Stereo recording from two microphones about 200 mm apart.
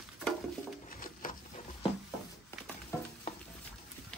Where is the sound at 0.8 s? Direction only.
45° left (ahead or behind).